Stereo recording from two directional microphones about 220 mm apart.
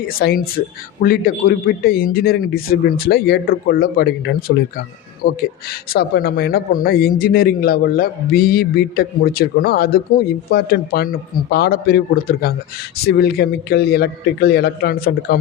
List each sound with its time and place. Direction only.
0.2 s a man's voice: 45° left (ahead or behind)